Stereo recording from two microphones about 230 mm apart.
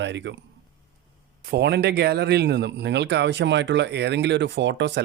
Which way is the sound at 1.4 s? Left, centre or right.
Right.